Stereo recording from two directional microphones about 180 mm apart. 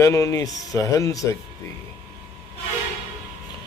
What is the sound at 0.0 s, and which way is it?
Speech, 15° left (ahead or behind).